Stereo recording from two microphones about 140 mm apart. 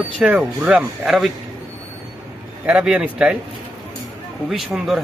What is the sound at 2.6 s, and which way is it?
Speech, 10° right (ahead or behind).